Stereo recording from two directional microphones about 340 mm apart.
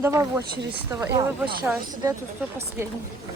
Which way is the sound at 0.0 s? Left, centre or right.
Centre.